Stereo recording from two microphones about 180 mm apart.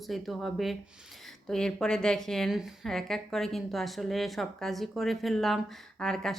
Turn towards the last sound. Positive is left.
turn(degrees=5)  # may be behind; listen again after turning